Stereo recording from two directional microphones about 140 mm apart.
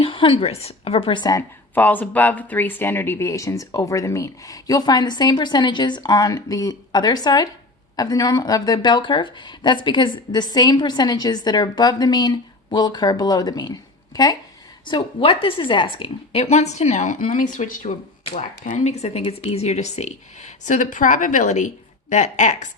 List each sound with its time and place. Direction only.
0.0 s a woman's voice: 40° left (ahead or behind)
1.7 s speech: 10° left (ahead or behind); by 13.7 s 30° left (ahead or behind)
14.8 s a woman's voice: 35° left (ahead or behind); by 22.7 s 60° left (ahead or behind)